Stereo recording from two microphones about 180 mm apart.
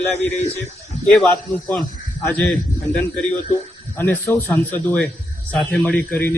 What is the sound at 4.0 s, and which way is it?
A man's voice, 10° left (ahead or behind).